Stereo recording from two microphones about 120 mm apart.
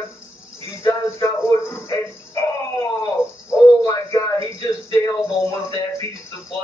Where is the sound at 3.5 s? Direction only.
25° left (ahead or behind).